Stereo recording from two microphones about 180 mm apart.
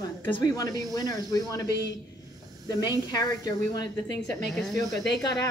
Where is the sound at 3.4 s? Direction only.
25° left (ahead or behind).